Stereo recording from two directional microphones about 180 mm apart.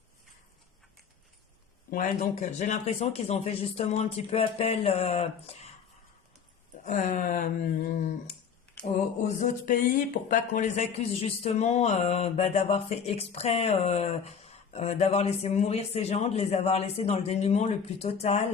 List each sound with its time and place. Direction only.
1.9 s speech: 50° left (ahead or behind)
6.8 s a sound: 45° left (ahead or behind)
8.9 s speech: 45° left (ahead or behind)